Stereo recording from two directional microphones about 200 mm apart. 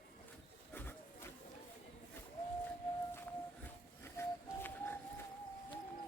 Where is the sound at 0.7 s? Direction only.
10° left (ahead or behind).